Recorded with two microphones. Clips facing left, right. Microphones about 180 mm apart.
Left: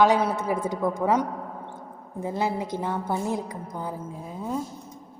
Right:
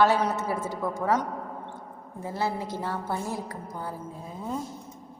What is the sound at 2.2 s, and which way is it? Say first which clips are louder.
A woman's voice: left 3 dB; 20° left (ahead or behind).